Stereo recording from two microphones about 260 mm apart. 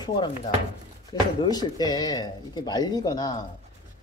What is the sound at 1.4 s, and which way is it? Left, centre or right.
Speech, centre.